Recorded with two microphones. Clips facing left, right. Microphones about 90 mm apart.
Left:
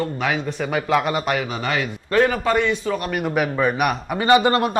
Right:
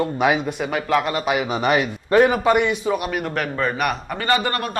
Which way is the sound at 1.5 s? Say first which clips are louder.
Right 5 dB; 20° right (ahead or behind).